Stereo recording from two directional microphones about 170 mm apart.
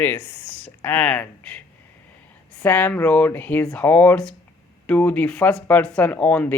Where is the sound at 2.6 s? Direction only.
10° left (ahead or behind).